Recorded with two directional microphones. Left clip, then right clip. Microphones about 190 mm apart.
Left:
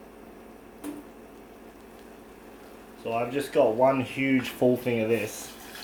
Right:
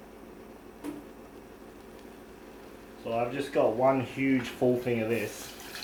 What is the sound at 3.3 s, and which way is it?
Speech, 45° left (ahead or behind).